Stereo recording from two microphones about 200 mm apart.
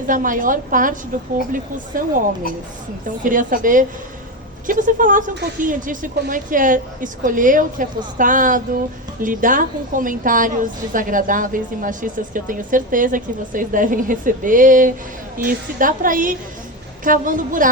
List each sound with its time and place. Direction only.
0.1 s a woman's voice: 40° right (ahead or behind)
1.9 s a woman's voice: 45° right (ahead or behind)
3.2 s a woman's voice: 40° right (ahead or behind)